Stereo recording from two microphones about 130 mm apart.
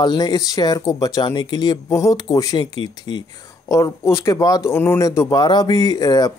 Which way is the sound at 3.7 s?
25° left (ahead or behind).